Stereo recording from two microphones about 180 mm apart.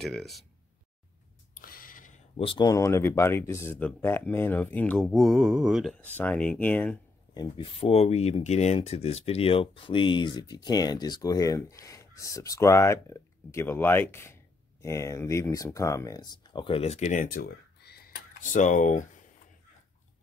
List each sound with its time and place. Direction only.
0.0 s mantra: centre (ahead or behind)
1.5 s a sound: 50° left (ahead or behind)
2.3 s speech: 30° left (ahead or behind); by 5.0 s 10° left (ahead or behind)
5.0 s mantra: centre (ahead or behind)
5.9 s speech: 10° left (ahead or behind)
7.3 s speech: 30° left (ahead or behind); by 19.0 s 45° left (ahead or behind)